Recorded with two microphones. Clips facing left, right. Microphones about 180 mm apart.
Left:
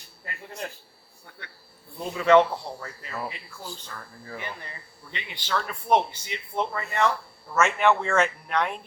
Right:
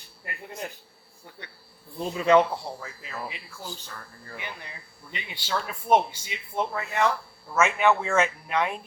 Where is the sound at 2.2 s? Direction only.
10° right (ahead or behind).